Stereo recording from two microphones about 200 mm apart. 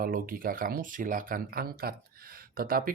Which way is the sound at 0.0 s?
45° right (ahead or behind).